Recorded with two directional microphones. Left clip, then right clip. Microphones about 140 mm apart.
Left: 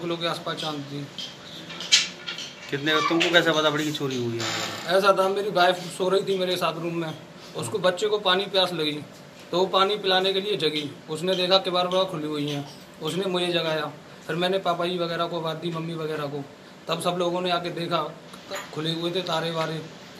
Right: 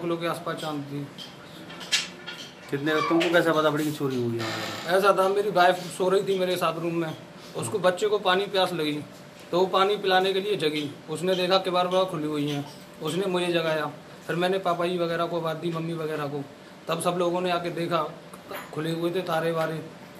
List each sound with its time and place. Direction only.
0.1 s a man's voice: 5° right (ahead or behind)
2.7 s a man's voice: 5° right (ahead or behind)